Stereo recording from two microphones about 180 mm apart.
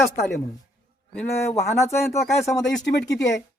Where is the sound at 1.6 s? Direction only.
15° left (ahead or behind).